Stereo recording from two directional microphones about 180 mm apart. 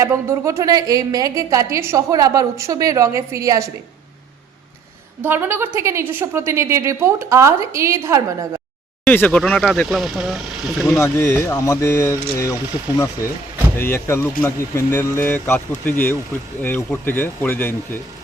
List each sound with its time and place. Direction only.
0.0 s a woman's voice: 15° right (ahead or behind)
5.2 s a woman's voice: 10° right (ahead or behind)
9.0 s speech: 10° left (ahead or behind)
10.8 s speech: 15° left (ahead or behind)
13.7 s speech: 15° left (ahead or behind)